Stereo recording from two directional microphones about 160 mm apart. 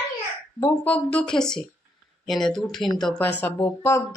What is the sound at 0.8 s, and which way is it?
Speech, 10° left (ahead or behind).